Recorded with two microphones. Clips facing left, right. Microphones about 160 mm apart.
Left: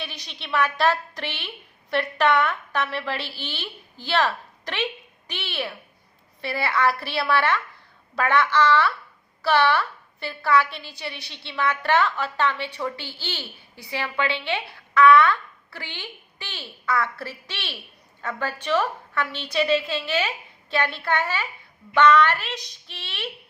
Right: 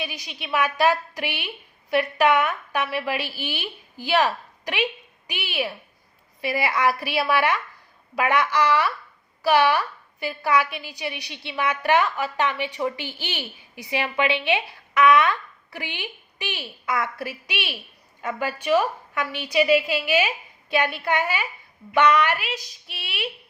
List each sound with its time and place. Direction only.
0.0 s a woman's voice: 10° right (ahead or behind)